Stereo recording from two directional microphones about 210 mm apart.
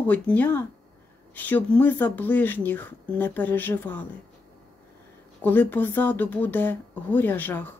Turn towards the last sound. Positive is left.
turn(degrees=10)  # may be behind; listen again after turning